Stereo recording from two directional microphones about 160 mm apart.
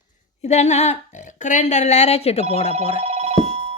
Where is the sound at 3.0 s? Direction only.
40° right (ahead or behind).